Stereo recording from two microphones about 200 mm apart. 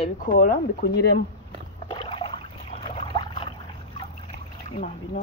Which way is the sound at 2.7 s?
25° left (ahead or behind).